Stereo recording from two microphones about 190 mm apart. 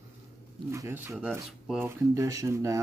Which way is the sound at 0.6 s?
15° right (ahead or behind).